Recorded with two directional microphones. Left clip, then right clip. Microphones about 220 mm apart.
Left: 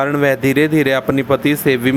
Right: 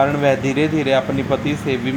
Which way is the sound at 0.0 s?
30° left (ahead or behind).